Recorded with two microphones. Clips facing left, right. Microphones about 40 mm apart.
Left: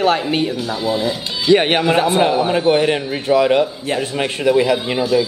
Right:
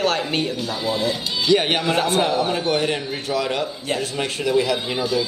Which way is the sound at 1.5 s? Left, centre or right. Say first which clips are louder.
Left 5 dB; left.